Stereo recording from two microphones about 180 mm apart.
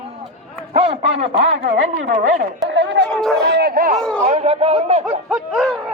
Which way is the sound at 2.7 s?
85° right.